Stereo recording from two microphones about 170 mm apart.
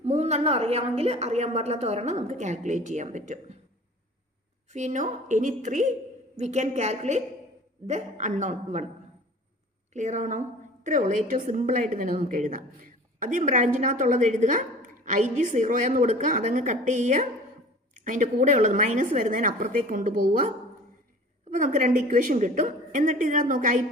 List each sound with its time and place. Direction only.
0.0 s a woman's voice: 40° right (ahead or behind)
4.7 s a woman's voice: 45° right (ahead or behind)
9.9 s a woman's voice: 45° right (ahead or behind)
21.5 s a woman's voice: 50° right (ahead or behind)